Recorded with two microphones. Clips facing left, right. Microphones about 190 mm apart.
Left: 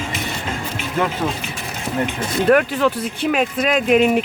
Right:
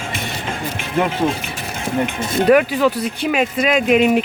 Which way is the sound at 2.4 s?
5° right (ahead or behind).